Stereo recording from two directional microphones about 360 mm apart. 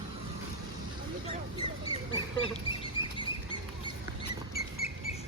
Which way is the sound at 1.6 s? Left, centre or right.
Centre.